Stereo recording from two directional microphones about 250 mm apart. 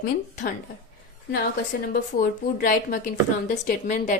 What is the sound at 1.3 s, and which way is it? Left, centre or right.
A woman's voice, left.